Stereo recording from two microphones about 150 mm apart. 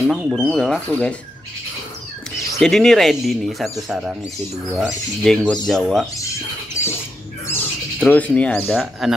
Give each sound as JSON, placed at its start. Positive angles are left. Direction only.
{"t": 0.1, "sound": "speech", "side_deg": 0}
{"t": 2.6, "sound": "speech", "side_deg": 0}
{"t": 6.8, "sound": "squawk", "side_deg": 20}
{"t": 7.4, "sound": "speech", "side_deg": 15}
{"t": 9.0, "sound": "speech", "side_deg": 0}